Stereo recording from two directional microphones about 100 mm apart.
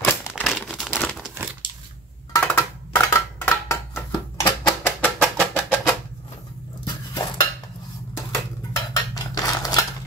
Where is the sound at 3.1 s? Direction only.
30° left (ahead or behind).